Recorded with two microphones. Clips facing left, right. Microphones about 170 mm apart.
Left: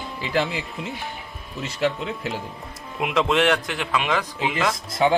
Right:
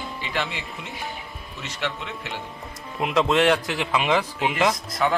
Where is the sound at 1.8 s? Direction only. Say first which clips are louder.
Left 7 dB; 35° left (ahead or behind).